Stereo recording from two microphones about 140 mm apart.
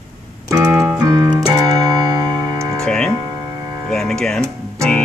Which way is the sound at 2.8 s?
5° left (ahead or behind).